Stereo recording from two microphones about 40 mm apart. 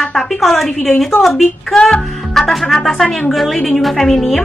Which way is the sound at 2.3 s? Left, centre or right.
Centre.